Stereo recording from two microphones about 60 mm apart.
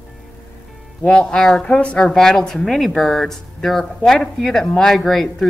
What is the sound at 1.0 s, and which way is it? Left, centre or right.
A woman's voice, centre.